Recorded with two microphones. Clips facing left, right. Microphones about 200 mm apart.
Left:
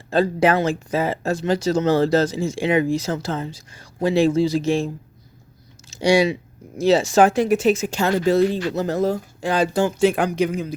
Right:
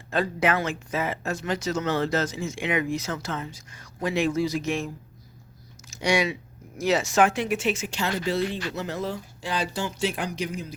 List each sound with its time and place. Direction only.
0.1 s speech: 35° left (ahead or behind)
5.9 s speech: 30° left (ahead or behind); by 10.8 s 60° left (ahead or behind)